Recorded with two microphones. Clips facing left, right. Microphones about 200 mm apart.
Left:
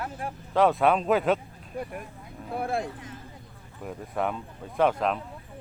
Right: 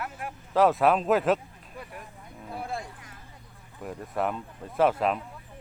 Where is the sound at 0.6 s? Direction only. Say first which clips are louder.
Even; centre (ahead or behind).